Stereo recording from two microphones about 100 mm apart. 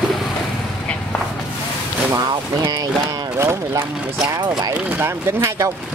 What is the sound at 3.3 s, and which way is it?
Speech, 25° right (ahead or behind).